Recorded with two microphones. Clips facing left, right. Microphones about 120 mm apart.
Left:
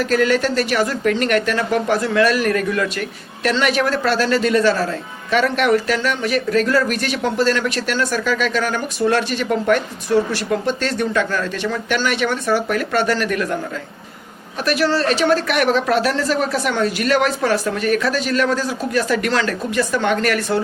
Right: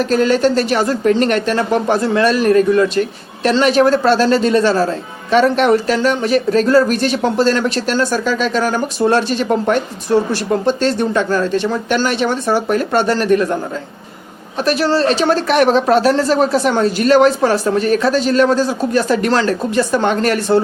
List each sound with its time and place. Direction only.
0.0 s speech: 30° right (ahead or behind)
14.6 s speech: 30° right (ahead or behind)